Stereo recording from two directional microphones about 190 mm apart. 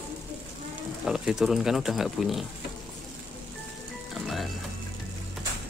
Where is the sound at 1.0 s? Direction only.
5° right (ahead or behind).